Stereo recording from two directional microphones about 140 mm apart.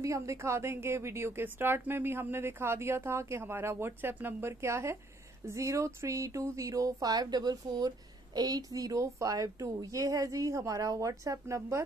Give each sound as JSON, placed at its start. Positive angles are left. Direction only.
{"t": 0.0, "sound": "a woman's voice", "side_deg": -20}